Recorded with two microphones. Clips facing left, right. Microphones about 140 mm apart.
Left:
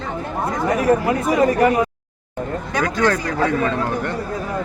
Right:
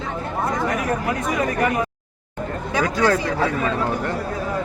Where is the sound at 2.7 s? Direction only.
5° right (ahead or behind).